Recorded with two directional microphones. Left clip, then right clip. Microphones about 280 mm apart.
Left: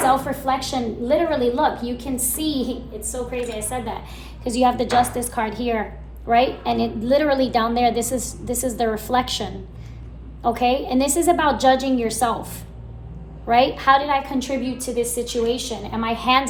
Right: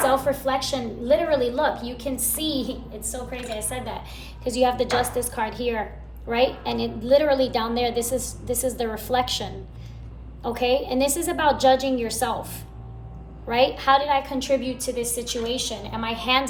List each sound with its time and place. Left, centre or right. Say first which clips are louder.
0.0 s a woman's voice: left 2 dB; centre
4.4 s a woman's voice: left 2 dB; left